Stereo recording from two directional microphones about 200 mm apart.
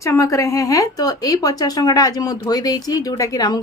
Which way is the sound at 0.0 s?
15° left (ahead or behind).